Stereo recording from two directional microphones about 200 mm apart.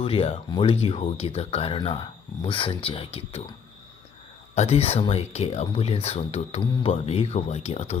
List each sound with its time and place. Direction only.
0.0 s speech: 25° left (ahead or behind)
4.5 s speech: 30° left (ahead or behind)